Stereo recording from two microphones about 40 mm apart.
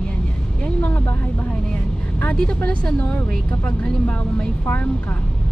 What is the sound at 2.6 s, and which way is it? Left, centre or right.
Speech, left.